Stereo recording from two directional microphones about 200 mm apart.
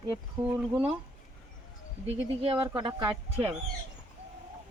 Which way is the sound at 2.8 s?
20° right (ahead or behind).